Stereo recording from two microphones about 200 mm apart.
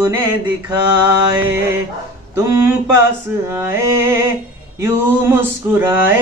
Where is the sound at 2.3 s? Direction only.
15° right (ahead or behind).